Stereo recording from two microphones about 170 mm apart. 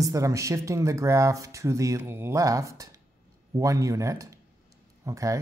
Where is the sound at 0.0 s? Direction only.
20° right (ahead or behind).